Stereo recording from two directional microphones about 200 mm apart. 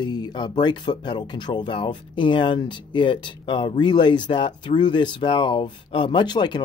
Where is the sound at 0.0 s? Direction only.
20° left (ahead or behind).